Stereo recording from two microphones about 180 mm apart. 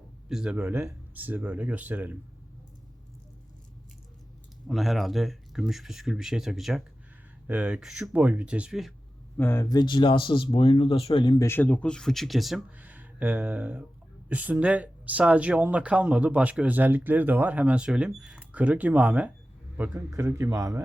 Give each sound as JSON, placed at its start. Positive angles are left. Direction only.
{"t": 0.3, "sound": "speech", "side_deg": -5}
{"t": 4.6, "sound": "speech", "side_deg": 0}
{"t": 9.4, "sound": "speech", "side_deg": 15}
{"t": 11.4, "sound": "speech", "side_deg": 10}